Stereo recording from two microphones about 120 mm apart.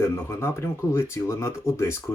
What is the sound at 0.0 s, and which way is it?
Speech, 20° left (ahead or behind).